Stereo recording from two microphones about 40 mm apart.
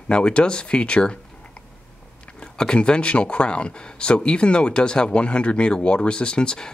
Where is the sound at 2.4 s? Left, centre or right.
Centre.